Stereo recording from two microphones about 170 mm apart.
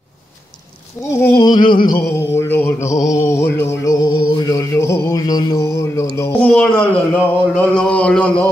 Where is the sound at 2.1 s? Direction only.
15° left (ahead or behind).